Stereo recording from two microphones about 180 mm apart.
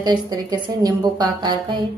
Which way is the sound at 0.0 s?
20° right (ahead or behind).